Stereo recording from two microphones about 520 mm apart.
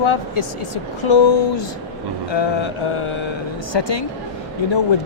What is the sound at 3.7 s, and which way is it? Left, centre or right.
Speech, left.